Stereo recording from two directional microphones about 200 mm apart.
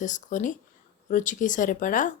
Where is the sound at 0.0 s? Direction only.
40° left (ahead or behind).